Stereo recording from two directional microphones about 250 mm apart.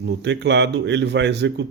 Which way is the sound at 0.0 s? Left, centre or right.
Right.